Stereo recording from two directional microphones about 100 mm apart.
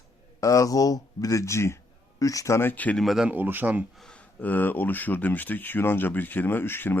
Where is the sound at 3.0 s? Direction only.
5° right (ahead or behind).